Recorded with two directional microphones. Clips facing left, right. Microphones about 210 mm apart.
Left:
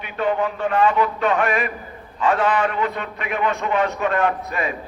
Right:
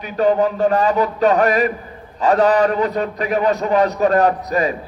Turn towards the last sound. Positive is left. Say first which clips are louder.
# right 6 dB
turn(degrees=-40)  # may be behind; listen again after turning